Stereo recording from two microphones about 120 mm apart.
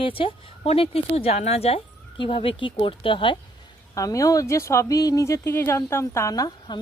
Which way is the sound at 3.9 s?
25° left (ahead or behind).